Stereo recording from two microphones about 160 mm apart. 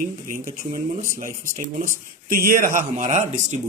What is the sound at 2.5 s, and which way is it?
Speech, 55° right (ahead or behind).